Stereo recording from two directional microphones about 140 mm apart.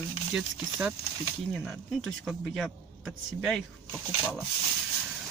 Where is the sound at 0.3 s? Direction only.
5° right (ahead or behind).